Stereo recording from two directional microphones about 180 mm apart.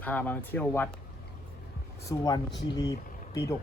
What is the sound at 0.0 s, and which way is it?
Speech, 10° left (ahead or behind).